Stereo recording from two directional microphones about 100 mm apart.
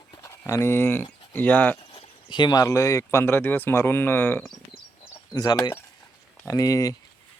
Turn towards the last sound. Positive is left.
turn(degrees=35)  # may be behind; listen again after turning